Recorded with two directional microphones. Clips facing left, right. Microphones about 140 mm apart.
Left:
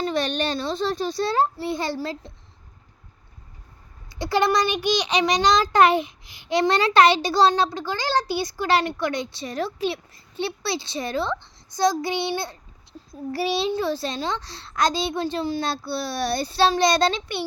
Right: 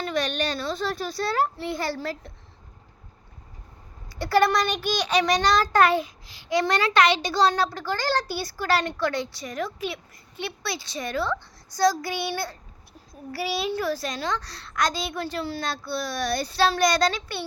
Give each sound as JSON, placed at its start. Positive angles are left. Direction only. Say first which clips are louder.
{"t": 0.0, "sound": "a child's voice", "louder": "left 2 dB", "side_deg": 30}
{"t": 4.1, "sound": "a child's voice", "louder": "even", "side_deg": 20}